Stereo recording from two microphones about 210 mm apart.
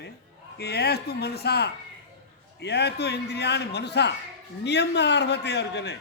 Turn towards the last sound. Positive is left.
turn(degrees=55)  # may be behind; listen again after turning